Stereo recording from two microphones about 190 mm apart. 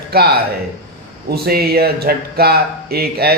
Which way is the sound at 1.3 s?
55° right (ahead or behind).